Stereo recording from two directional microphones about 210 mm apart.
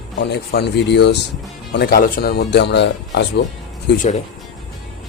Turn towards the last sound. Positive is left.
turn(degrees=55)  # may be behind; listen again after turning